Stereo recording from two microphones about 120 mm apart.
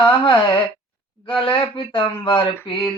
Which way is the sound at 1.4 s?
45° left (ahead or behind).